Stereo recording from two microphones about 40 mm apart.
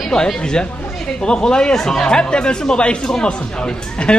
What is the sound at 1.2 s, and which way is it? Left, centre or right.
Speech, left.